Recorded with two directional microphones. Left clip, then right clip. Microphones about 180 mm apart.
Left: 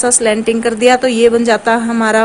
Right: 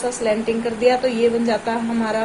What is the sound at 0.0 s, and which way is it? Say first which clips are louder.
A woman's voice: left 8 dB; 55° left (ahead or behind).